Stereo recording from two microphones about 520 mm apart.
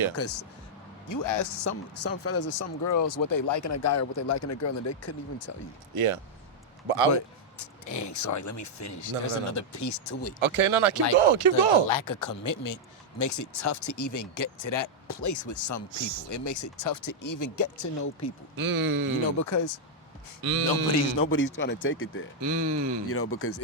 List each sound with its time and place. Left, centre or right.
0.2 s speech: left
5.9 s speech: right
7.9 s speech: left
10.4 s speech: right
11.9 s speech: left
18.5 s speech: right
19.4 s speech: left
20.4 s speech: right
21.2 s speech: left
22.4 s speech: right
23.0 s speech: left